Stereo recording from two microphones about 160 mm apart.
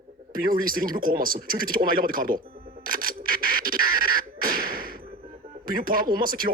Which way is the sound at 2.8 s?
60° right (ahead or behind).